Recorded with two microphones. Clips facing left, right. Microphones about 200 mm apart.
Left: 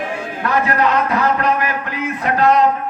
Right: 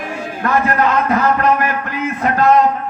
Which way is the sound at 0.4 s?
50° right (ahead or behind).